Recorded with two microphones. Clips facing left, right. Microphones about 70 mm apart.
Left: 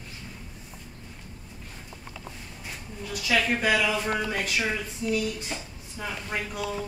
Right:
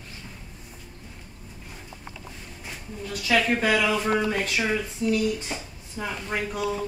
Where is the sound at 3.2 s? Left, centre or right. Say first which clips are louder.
Right 2 dB; centre.